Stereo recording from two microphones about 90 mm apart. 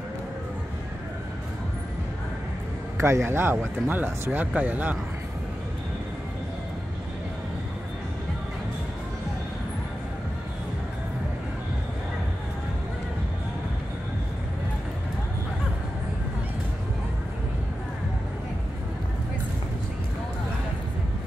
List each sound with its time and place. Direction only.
3.0 s speech: 30° right (ahead or behind)